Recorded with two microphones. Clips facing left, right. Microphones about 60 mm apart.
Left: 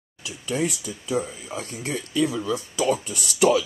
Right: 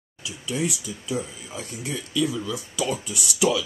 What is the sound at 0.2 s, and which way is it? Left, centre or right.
Speech, left.